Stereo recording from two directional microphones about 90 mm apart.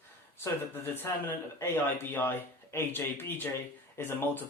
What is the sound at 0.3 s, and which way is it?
Speech, 25° left (ahead or behind).